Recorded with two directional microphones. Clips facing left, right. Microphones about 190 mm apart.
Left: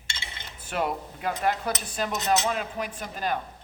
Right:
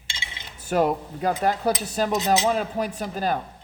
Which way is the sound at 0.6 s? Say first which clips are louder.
Right 7 dB; 40° right (ahead or behind).